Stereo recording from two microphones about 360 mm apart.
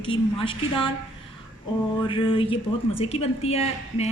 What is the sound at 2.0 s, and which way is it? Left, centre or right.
A woman's voice, centre.